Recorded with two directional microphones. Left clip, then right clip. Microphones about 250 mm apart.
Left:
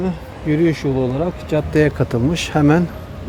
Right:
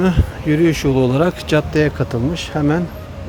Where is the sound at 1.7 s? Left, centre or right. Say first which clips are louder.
Left 1 dB; centre.